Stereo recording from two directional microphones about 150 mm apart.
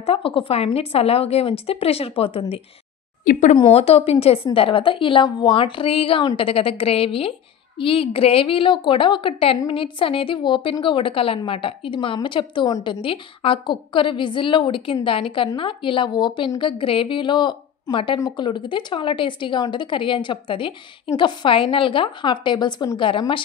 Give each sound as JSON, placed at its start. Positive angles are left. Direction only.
{"t": 0.0, "sound": "a woman's voice", "side_deg": 40}
{"t": 3.3, "sound": "speech", "side_deg": 55}
{"t": 3.5, "sound": "a woman's voice", "side_deg": 40}